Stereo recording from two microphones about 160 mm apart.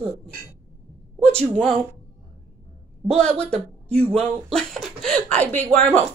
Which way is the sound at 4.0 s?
40° right (ahead or behind).